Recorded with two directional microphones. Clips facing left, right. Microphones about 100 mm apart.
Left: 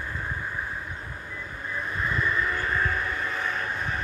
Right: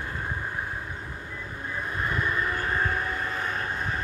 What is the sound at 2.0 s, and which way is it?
Vehicle, 45° right (ahead or behind).